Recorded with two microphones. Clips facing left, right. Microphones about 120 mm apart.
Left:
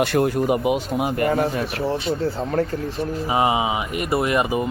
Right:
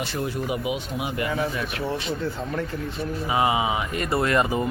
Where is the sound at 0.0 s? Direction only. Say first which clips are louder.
Left 9 dB; 60° left (ahead or behind); by 2.6 s 40° left (ahead or behind).